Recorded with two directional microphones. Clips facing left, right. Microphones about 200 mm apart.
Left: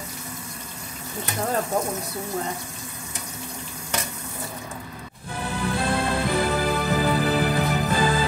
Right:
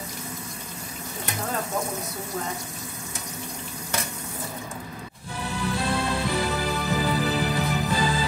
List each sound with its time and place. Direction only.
5.4 s music: 50° left (ahead or behind)